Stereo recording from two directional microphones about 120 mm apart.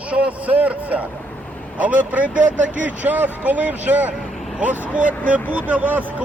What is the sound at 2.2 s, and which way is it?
Speech, 90° right.